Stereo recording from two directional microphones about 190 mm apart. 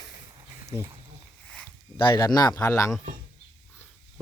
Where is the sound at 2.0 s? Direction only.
20° left (ahead or behind).